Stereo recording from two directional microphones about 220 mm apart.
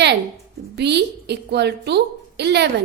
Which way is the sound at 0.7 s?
50° right (ahead or behind).